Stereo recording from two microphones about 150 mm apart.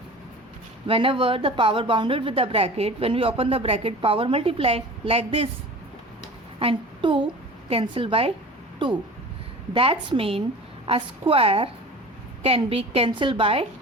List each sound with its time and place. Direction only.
0.9 s speech: 40° right (ahead or behind)
6.6 s a woman's voice: 35° right (ahead or behind)
9.7 s speech: 35° right (ahead or behind)